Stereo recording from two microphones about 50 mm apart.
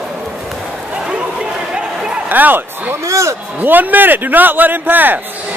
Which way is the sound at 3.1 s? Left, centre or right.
Right.